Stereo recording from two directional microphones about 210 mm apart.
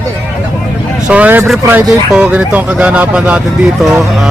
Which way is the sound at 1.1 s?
10° right (ahead or behind).